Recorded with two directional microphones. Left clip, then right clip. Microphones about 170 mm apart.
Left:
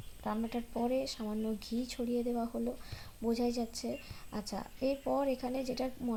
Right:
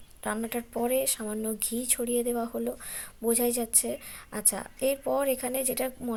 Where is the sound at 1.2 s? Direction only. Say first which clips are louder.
Right 5 dB; 40° right (ahead or behind).